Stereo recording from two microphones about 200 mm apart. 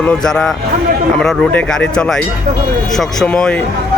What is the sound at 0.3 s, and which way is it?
Speech, centre (ahead or behind).